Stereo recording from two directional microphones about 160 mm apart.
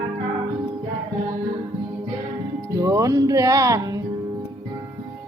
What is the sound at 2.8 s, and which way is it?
Music, 20° right (ahead or behind).